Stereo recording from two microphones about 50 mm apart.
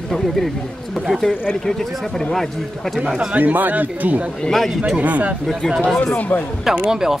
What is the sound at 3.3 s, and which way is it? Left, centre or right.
Speech, right.